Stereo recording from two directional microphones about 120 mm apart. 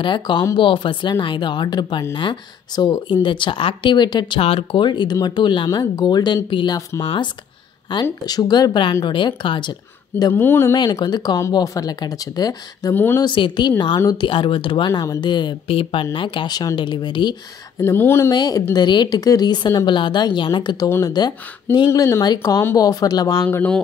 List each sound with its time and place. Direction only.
0.0 s a woman's voice: 40° left (ahead or behind)
4.4 s a woman's voice: 50° left (ahead or behind)
10.3 s speech: 20° left (ahead or behind)
10.7 s a woman's voice: 35° left (ahead or behind)
12.9 s a woman's voice: 15° left (ahead or behind)
13.2 s a woman's voice: 40° left (ahead or behind)
17.7 s speech: 15° left (ahead or behind)
18.3 s a woman's voice: 35° left (ahead or behind)
23.5 s a woman's voice: 15° left (ahead or behind)